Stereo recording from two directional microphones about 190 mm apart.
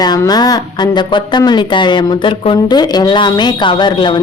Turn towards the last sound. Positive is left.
turn(degrees=25)  # may be behind; listen again after turning